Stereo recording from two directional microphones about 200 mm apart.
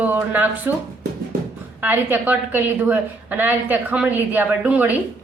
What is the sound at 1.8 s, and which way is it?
A woman's voice, 10° right (ahead or behind).